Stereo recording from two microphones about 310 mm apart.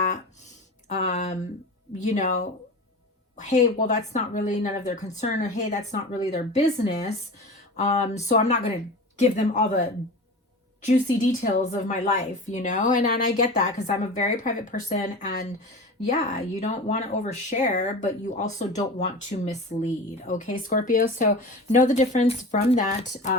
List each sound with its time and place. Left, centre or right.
0.9 s a sound: left
2.0 s speech: left
10.8 s speech: left